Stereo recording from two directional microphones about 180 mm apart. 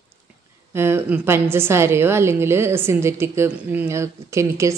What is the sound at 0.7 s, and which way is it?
A woman's voice, 15° right (ahead or behind).